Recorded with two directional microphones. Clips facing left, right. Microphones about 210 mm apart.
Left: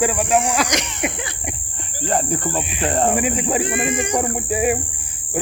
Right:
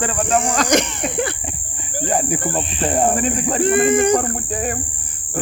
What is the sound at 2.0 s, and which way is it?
Speech, 10° right (ahead or behind).